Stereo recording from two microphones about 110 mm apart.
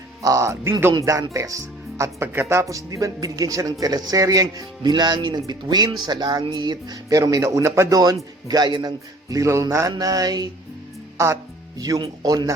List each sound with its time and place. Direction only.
0.2 s speech: 30° right (ahead or behind)
11.2 s speech: 30° right (ahead or behind)